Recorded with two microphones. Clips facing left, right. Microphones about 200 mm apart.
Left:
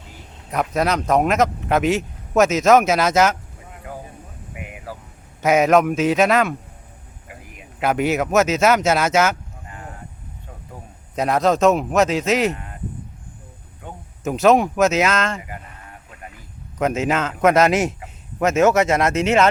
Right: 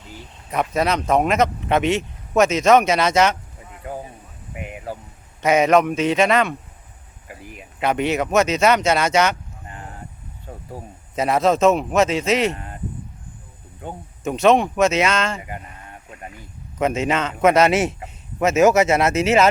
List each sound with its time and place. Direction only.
0.5 s speech: centre (ahead or behind)
4.9 s a man's voice: 30° right (ahead or behind)
5.4 s speech: centre (ahead or behind)
7.8 s speech: 5° left (ahead or behind)
11.1 s speech: centre (ahead or behind)
13.8 s speech: 35° right (ahead or behind)
14.3 s speech: centre (ahead or behind)
15.4 s speech: 25° right (ahead or behind)
16.7 s speech: centre (ahead or behind)